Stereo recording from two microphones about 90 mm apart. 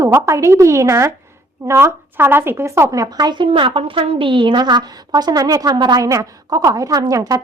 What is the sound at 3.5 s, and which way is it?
A woman's voice, 80° right.